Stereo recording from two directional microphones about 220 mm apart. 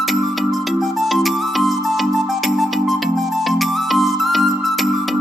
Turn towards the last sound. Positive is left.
turn(degrees=0)  # may be behind; listen again after turning